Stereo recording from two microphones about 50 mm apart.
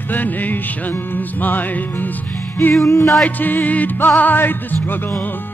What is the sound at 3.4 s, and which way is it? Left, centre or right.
Music, left.